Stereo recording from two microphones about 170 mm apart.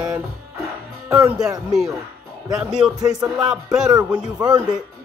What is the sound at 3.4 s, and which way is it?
Speech, 5° right (ahead or behind).